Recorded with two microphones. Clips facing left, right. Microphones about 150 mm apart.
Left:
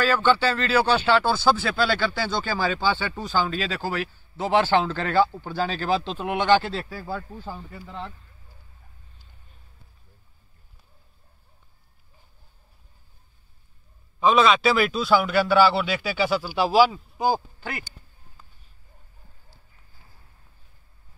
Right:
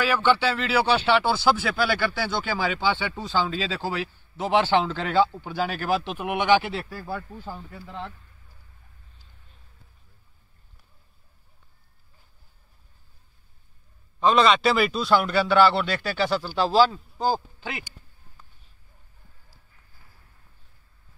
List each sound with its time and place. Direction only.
0.0 s speech: 15° right (ahead or behind)
7.2 s speech: 10° left (ahead or behind)
7.5 s a man's voice: centre (ahead or behind)
14.2 s a man's voice: centre (ahead or behind)
17.6 s speech: 20° right (ahead or behind)